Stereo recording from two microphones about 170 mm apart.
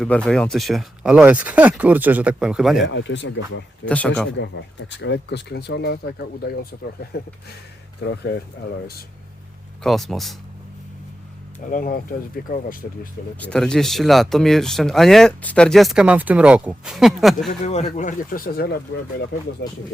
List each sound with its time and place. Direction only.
0.0 s speech: 5° left (ahead or behind)
2.9 s speech: 90° left
3.8 s a man's voice: 10° left (ahead or behind)
4.4 s speech: 85° left; by 7.2 s 65° left (ahead or behind)
8.0 s speech: 75° left (ahead or behind)
9.8 s speech: centre (ahead or behind)
11.6 s speech: 55° left (ahead or behind)
13.4 s speech: 5° left (ahead or behind)
17.7 s speech: 40° left (ahead or behind); by 18.8 s 65° left (ahead or behind)
19.6 s speech: 80° left